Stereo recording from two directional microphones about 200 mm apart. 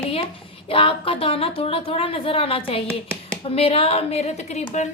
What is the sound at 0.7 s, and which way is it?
A woman's voice, 25° left (ahead or behind).